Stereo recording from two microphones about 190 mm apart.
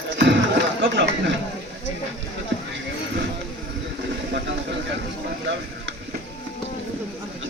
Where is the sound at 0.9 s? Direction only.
75° right (ahead or behind).